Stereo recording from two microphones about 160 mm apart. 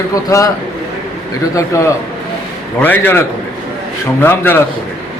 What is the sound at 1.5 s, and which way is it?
A man's voice, 20° left (ahead or behind).